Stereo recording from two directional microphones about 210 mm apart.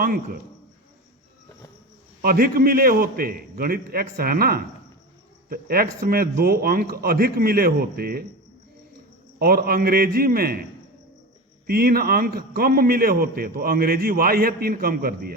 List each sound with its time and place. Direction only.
2.2 s a man's voice: 45° right (ahead or behind)
9.4 s a man's voice: 45° right (ahead or behind)
11.6 s a man's voice: 45° right (ahead or behind)